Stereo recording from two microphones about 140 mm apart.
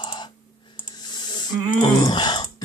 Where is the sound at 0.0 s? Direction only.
35° left (ahead or behind).